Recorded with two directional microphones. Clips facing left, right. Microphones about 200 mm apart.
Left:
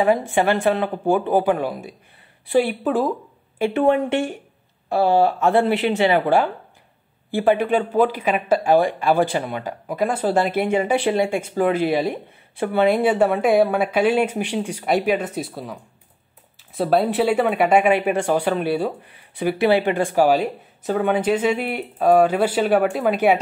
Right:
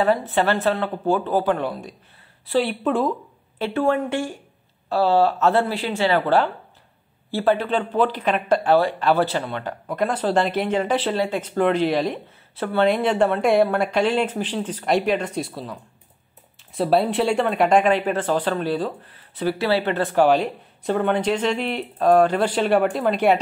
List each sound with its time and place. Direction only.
0.0 s speech: 15° left (ahead or behind)
16.7 s speech: centre (ahead or behind)